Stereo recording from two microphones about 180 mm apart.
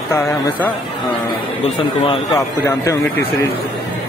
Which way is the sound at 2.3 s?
15° left (ahead or behind).